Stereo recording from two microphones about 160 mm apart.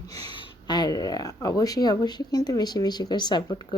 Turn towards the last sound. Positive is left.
turn(degrees=25)  # may be behind; listen again after turning